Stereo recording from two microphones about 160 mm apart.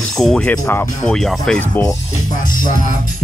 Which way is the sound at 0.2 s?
5° left (ahead or behind).